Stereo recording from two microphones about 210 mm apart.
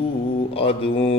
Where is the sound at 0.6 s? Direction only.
25° left (ahead or behind).